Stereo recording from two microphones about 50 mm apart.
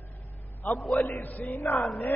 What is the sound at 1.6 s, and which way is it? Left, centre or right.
Speech, centre.